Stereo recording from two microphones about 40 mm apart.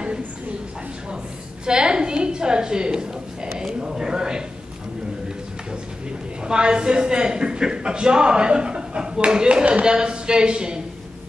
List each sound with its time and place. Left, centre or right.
1.7 s a woman's voice: right
3.5 s a sound: centre
6.4 s a man's voice: right